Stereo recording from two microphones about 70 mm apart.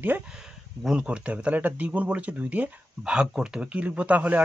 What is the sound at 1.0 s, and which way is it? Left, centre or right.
Speech, centre.